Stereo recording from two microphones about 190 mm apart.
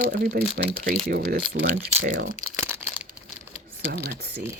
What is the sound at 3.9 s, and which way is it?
Speech, 55° right (ahead or behind).